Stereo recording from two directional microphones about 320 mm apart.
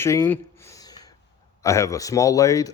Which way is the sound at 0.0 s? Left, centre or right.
Centre.